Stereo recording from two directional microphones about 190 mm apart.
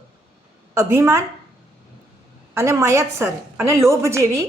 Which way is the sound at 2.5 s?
15° right (ahead or behind).